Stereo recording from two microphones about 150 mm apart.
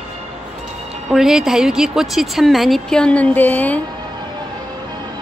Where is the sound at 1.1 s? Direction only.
Centre (ahead or behind).